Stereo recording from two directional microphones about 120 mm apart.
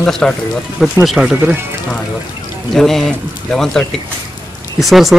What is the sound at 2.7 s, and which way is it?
Speech, 5° left (ahead or behind).